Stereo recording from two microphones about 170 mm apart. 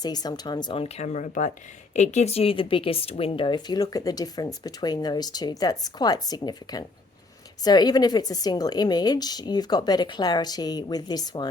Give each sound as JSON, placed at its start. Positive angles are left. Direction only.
{"t": 0.0, "sound": "speech", "side_deg": 25}